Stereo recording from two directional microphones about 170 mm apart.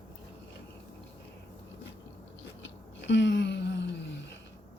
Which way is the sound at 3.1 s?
90° left.